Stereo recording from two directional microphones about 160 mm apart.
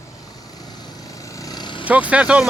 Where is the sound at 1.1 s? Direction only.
20° left (ahead or behind).